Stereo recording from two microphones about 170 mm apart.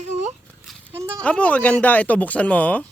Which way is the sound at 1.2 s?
5° left (ahead or behind).